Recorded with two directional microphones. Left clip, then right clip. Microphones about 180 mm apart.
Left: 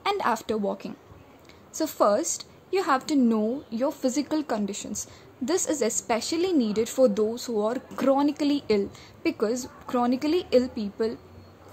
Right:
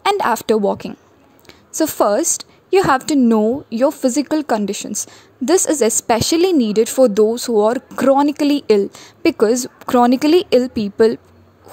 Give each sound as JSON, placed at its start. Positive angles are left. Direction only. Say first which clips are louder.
{"t": 0.0, "sound": "a woman's voice", "louder": "right 9 dB", "side_deg": -50}